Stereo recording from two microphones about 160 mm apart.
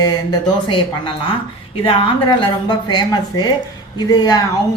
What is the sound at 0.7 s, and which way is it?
A woman's voice, 35° left (ahead or behind).